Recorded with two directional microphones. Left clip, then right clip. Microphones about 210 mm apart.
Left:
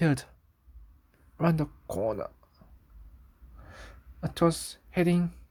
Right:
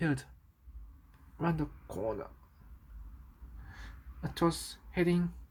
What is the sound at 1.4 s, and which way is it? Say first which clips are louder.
Speech: left 6 dB; 45° left (ahead or behind).